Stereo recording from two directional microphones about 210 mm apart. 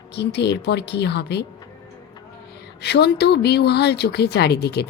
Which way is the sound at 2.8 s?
50° left (ahead or behind).